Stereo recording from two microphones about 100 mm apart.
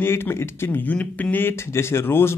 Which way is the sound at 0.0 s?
25° left (ahead or behind).